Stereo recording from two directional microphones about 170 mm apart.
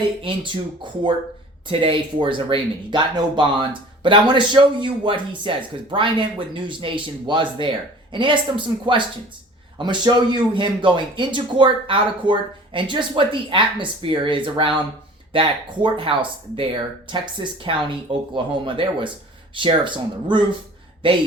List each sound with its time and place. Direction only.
0.2 s a man's voice: 30° right (ahead or behind)